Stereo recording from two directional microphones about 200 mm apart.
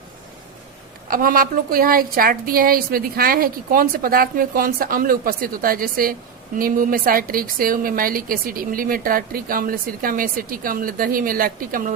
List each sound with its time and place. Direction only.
1.0 s a woman's voice: 45° right (ahead or behind)